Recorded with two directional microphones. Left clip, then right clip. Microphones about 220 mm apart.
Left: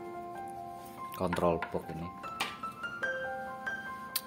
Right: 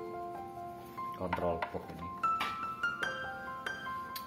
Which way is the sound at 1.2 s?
45° left (ahead or behind).